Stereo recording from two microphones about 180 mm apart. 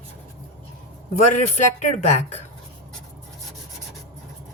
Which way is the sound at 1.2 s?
40° left (ahead or behind).